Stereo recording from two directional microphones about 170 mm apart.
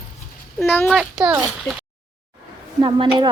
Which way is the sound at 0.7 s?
10° left (ahead or behind).